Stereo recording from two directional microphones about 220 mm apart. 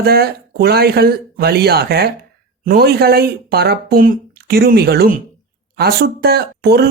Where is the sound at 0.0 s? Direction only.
45° right (ahead or behind).